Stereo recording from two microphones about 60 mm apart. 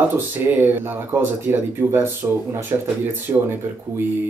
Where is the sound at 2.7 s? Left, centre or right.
Right.